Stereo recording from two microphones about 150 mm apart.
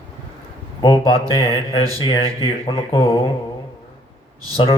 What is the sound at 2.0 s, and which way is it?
Speech, 35° left (ahead or behind).